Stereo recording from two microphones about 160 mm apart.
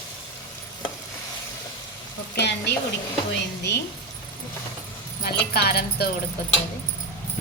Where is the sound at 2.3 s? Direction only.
90° left.